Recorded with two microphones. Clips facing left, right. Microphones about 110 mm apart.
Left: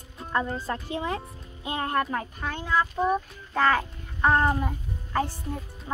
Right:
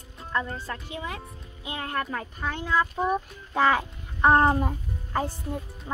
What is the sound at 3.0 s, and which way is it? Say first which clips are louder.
A child's voice: left 1 dB; 10° right (ahead or behind).